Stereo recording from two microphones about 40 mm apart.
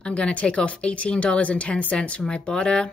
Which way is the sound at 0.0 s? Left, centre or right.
Left.